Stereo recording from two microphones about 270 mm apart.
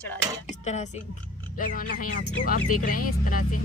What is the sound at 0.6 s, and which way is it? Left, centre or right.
Speech, left.